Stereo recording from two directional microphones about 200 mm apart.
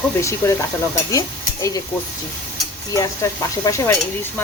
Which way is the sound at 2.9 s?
15° left (ahead or behind).